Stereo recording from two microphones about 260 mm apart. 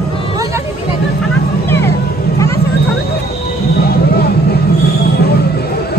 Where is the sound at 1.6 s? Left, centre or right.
Centre.